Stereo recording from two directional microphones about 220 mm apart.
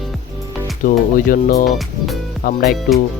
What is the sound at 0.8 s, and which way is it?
Speech, 40° left (ahead or behind).